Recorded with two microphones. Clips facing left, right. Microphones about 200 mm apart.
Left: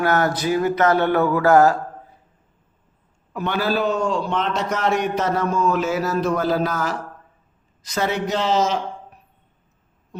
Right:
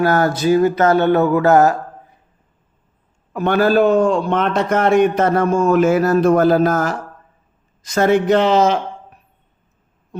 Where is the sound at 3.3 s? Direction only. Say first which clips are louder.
Right 7 dB; 50° right (ahead or behind).